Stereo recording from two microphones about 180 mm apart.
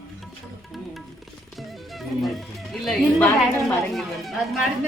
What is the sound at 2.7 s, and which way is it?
Speech, centre (ahead or behind).